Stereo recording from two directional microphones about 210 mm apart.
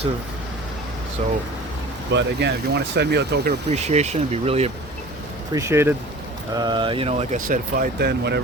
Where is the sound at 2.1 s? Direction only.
55° right (ahead or behind).